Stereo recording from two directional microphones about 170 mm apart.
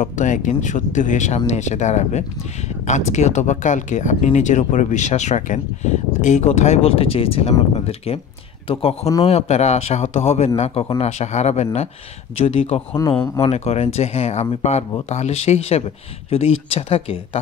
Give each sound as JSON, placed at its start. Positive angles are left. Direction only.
{"t": 0.0, "sound": "a man's voice", "side_deg": 45}